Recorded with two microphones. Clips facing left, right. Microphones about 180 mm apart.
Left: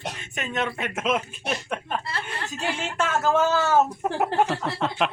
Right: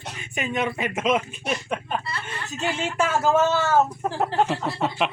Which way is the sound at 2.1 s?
55° left (ahead or behind).